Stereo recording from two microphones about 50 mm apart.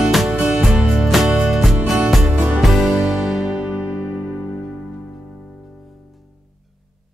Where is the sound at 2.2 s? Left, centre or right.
Right.